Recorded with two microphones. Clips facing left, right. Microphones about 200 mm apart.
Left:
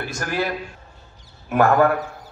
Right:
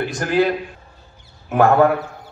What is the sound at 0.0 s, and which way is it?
Speech, 20° right (ahead or behind).